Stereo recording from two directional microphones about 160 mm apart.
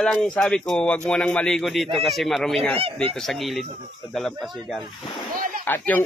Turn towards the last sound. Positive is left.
turn(degrees=10)  # may be behind; listen again after turning